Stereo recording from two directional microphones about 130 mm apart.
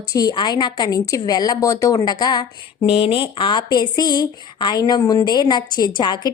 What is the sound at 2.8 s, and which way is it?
Speech, 45° left (ahead or behind).